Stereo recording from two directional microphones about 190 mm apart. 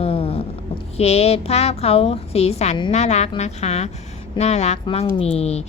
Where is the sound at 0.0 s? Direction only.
30° left (ahead or behind).